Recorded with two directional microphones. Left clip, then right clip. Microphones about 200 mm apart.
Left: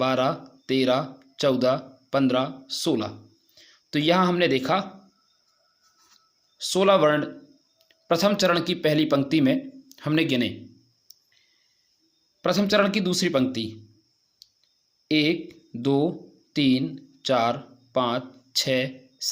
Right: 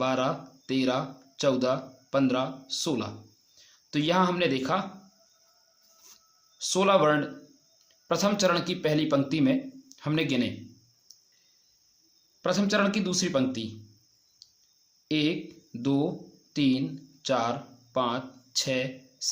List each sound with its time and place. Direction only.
0.0 s speech: 30° left (ahead or behind)
6.6 s speech: 25° left (ahead or behind)
11.1 s clicking: 30° left (ahead or behind)
12.4 s speech: 30° left (ahead or behind)
14.4 s clicking: 30° left (ahead or behind)
15.0 s speech: 30° left (ahead or behind)